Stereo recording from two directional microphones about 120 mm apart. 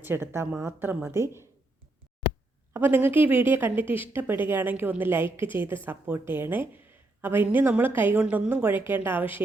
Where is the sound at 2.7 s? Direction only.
15° right (ahead or behind).